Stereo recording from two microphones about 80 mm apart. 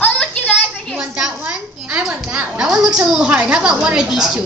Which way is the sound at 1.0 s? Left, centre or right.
Centre.